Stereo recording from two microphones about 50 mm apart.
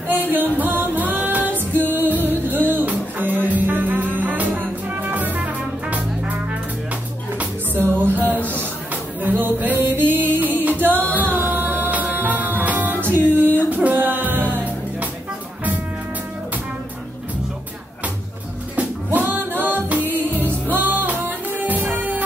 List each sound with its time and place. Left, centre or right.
0.1 s music: right
7.7 s music: right
19.6 s music: right